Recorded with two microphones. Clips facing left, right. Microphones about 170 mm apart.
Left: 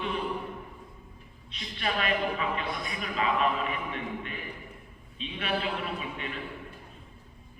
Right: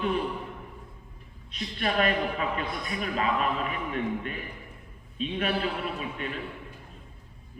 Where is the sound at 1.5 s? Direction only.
45° right (ahead or behind).